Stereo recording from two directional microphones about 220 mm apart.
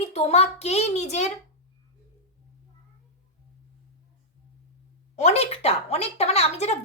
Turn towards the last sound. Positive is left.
turn(degrees=30)  # may be behind; listen again after turning